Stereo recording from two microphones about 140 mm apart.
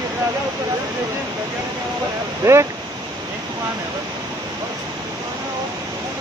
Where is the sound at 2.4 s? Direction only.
20° right (ahead or behind).